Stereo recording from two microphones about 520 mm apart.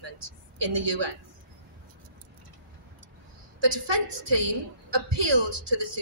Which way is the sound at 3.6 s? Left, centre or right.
Right.